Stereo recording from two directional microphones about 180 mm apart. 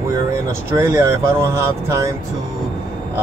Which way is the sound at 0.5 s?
15° right (ahead or behind).